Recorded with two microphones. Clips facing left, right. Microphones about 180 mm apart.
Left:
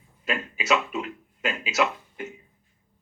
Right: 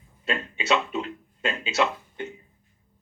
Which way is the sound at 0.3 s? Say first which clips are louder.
Even; 30° right (ahead or behind).